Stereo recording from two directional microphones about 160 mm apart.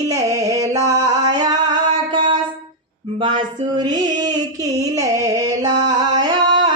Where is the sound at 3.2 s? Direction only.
30° right (ahead or behind).